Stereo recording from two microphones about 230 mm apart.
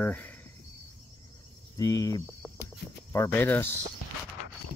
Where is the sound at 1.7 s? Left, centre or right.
Centre.